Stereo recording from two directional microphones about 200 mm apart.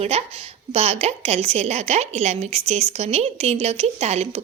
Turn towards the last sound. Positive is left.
turn(degrees=-30)  # may be behind; listen again after turning